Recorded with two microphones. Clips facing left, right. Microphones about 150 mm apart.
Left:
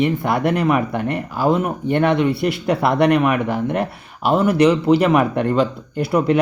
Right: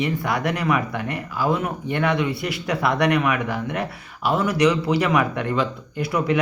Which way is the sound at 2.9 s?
30° left (ahead or behind).